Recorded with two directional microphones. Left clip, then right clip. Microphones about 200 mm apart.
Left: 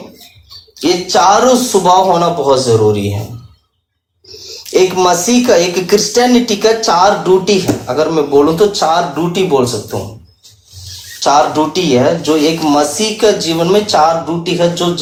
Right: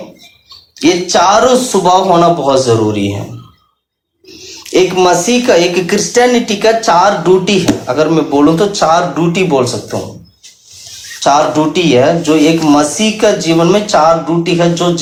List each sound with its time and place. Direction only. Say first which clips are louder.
0.8 s a man's voice: right 1 dB; 30° right (ahead or behind); by 3.1 s 15° right (ahead or behind)
4.7 s a man's voice: right 1 dB; 15° right (ahead or behind)
6.3 s speech: even; 45° right (ahead or behind)
6.6 s a man's voice: right 2 dB; 20° right (ahead or behind)
11.2 s a man's voice: right 1 dB; 25° right (ahead or behind)